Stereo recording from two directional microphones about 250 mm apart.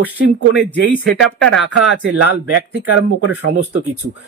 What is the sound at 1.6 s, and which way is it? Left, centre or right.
Speech, right.